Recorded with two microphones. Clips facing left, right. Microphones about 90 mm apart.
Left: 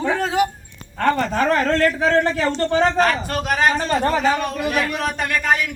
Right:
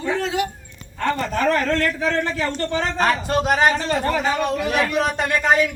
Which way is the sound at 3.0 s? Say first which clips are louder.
Even; 20° right (ahead or behind).